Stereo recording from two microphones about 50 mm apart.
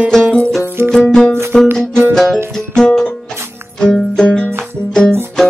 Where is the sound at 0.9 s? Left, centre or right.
Centre.